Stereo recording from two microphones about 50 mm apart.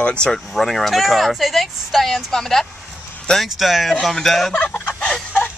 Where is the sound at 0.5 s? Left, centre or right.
Centre.